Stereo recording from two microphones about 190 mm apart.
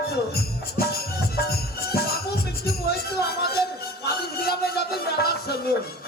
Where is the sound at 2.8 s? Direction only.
55° left (ahead or behind).